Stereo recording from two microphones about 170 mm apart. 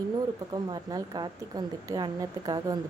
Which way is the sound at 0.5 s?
25° right (ahead or behind).